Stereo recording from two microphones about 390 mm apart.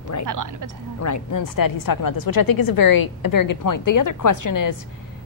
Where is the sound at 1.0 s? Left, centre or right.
Left.